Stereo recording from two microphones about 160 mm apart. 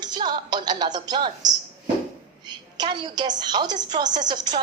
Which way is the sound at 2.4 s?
25° right (ahead or behind).